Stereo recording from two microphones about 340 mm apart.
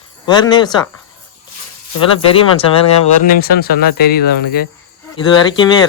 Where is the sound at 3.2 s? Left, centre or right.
Left.